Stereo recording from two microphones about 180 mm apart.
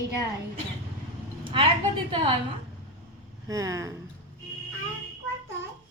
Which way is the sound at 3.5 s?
20° right (ahead or behind).